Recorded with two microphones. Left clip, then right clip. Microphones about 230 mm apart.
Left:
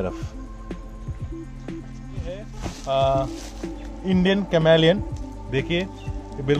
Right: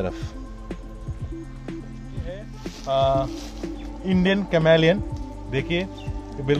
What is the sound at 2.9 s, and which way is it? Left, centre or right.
Speech, centre.